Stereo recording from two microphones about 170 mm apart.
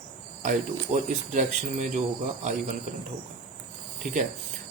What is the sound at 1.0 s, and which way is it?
Speech, 45° right (ahead or behind).